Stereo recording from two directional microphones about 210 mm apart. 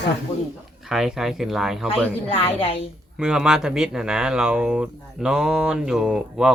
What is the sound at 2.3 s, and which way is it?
Speech, 25° left (ahead or behind).